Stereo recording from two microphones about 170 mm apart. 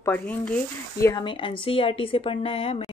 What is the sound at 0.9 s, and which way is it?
A woman's voice, 20° left (ahead or behind).